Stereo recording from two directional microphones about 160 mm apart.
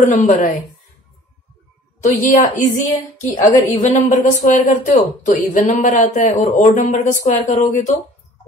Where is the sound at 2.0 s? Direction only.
50° left (ahead or behind).